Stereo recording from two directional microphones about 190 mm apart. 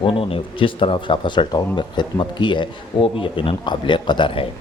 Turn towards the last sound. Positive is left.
turn(degrees=25)  # may be behind; listen again after turning